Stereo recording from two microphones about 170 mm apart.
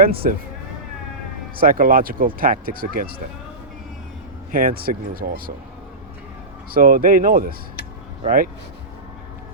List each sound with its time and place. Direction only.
0.0 s speech: 60° right (ahead or behind)
1.5 s speech: 55° right (ahead or behind)
4.5 s speech: 60° right (ahead or behind)
6.7 s speech: 55° right (ahead or behind)